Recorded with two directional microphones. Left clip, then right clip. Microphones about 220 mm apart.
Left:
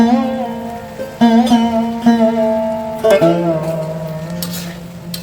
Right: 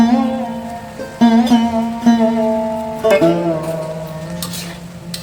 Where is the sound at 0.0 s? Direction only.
Centre (ahead or behind).